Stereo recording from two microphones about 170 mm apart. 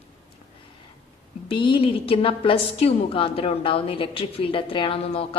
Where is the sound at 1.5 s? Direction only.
30° left (ahead or behind).